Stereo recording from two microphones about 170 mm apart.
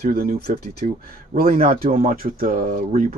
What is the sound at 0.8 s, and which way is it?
Speech, 50° right (ahead or behind).